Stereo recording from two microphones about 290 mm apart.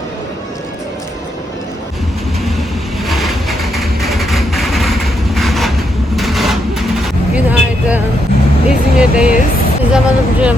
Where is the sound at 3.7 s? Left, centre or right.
Centre.